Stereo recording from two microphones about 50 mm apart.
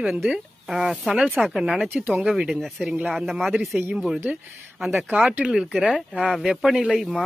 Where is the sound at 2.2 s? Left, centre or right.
Right.